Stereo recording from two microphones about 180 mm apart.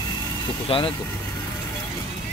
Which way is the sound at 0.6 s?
30° left (ahead or behind).